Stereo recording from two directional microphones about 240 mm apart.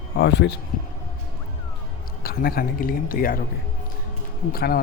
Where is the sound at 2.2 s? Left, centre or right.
Left.